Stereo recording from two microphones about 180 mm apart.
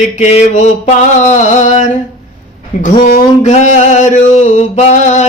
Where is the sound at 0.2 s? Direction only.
40° left (ahead or behind).